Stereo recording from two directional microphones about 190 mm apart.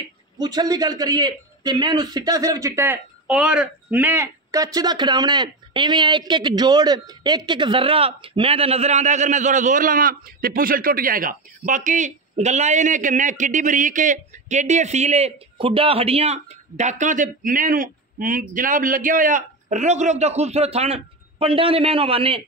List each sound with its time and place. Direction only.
0.4 s a man's voice: 20° right (ahead or behind)